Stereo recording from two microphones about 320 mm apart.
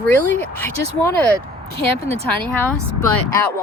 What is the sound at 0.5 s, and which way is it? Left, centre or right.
Speech, centre.